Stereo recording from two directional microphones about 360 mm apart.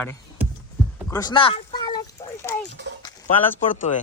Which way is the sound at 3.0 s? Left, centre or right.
Centre.